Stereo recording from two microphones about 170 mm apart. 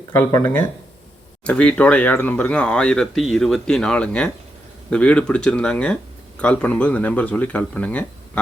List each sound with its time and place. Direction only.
0.1 s speech: 15° left (ahead or behind)